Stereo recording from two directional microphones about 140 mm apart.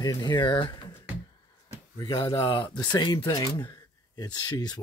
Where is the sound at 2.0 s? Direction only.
35° left (ahead or behind).